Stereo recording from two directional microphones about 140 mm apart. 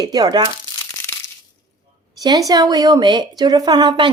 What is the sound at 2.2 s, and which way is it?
A woman's voice, 30° right (ahead or behind).